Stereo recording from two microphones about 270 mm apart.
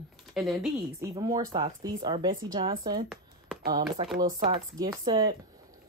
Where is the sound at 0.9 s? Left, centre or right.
Centre.